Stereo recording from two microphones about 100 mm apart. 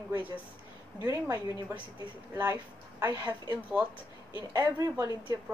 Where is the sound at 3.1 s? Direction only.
45° right (ahead or behind).